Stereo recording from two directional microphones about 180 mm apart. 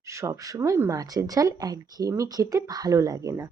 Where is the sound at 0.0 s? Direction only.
15° right (ahead or behind).